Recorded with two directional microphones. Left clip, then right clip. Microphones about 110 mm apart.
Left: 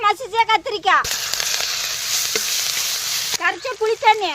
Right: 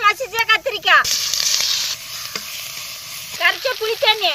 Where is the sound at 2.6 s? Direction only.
35° left (ahead or behind).